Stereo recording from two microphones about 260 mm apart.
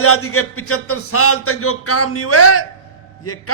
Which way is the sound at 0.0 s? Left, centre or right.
Left.